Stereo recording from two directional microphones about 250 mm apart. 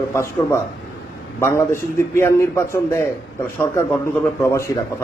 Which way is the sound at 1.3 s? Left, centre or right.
Centre.